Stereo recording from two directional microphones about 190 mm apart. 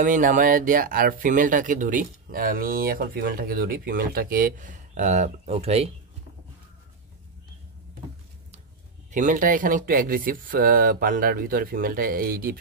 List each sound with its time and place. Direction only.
0.0 s speech: 45° right (ahead or behind)
9.1 s speech: 45° right (ahead or behind)